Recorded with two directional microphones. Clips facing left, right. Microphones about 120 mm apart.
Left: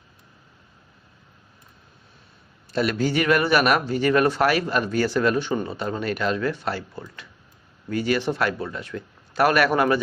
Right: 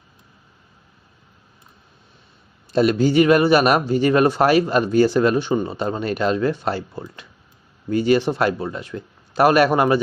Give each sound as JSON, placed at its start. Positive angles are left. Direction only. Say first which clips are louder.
{"t": 2.7, "sound": "speech", "louder": "right 6 dB", "side_deg": -25}